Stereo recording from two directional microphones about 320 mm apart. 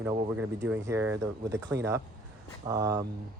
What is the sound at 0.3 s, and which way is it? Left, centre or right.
Speech, centre.